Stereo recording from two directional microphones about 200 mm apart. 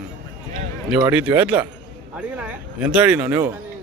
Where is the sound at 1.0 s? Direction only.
10° right (ahead or behind).